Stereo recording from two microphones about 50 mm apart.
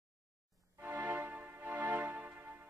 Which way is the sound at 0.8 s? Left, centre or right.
Right.